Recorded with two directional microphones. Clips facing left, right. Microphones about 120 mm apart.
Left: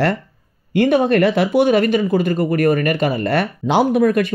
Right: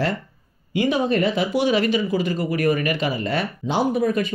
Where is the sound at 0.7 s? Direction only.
60° left (ahead or behind).